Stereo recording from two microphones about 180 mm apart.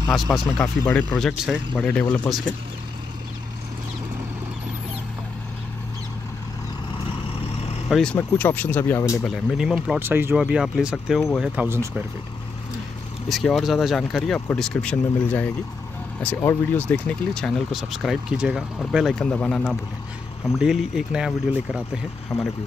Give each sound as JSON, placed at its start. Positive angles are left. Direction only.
{"t": 0.6, "sound": "speech", "side_deg": 10}
{"t": 7.9, "sound": "speech", "side_deg": 5}
{"t": 9.2, "sound": "speech", "side_deg": 0}
{"t": 13.3, "sound": "speech", "side_deg": 0}
{"t": 22.3, "sound": "speech", "side_deg": 35}